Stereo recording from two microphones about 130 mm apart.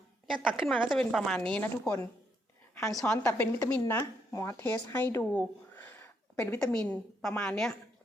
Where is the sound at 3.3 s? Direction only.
15° left (ahead or behind).